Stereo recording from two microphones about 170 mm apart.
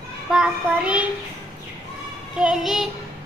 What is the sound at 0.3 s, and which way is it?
Child singing, 5° right (ahead or behind).